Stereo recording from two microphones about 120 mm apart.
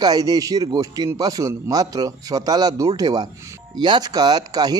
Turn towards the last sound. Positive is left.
turn(degrees=-35)  # may be behind; listen again after turning